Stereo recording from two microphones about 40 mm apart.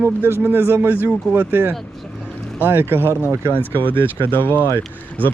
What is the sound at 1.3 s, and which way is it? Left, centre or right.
Speech, right.